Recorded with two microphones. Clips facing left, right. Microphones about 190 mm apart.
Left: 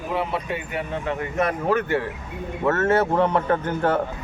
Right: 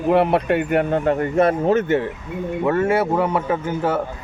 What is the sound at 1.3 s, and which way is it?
Speech, 25° right (ahead or behind).